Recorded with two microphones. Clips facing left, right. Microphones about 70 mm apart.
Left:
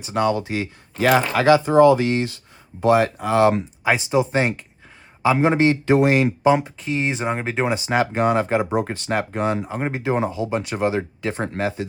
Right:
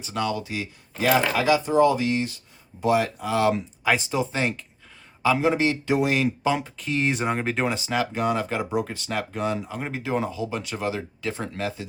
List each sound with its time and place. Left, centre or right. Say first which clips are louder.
0.1 s speech: left 7 dB; left
0.4 s speech: left 6 dB; left
0.9 s speech: left 4 dB; left
2.8 s speech: left 5 dB; left
3.8 s a man's voice: left 4 dB; left
5.5 s speech: left 5 dB; left
6.4 s speech: left 7 dB; left
7.9 s speech: left 5 dB; left